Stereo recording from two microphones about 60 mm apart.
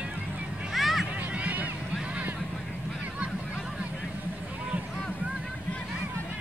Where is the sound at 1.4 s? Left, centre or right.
Right.